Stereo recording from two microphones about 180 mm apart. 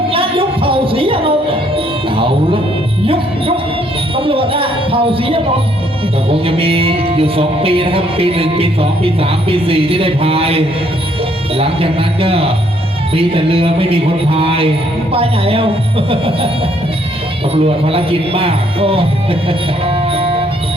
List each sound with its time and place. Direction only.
0.1 s music: 30° right (ahead or behind)
4.2 s music: 30° right (ahead or behind)
17.5 s speech: 35° right (ahead or behind)